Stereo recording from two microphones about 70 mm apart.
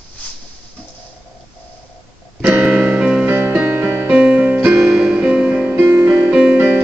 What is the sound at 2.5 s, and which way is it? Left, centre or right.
Music, centre.